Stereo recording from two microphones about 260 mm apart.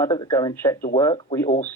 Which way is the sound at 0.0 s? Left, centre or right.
Centre.